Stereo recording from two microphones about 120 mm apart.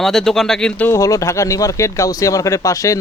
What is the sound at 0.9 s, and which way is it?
Speech, 25° left (ahead or behind).